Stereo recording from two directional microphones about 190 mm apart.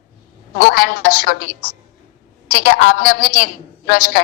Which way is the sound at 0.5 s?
55° left (ahead or behind).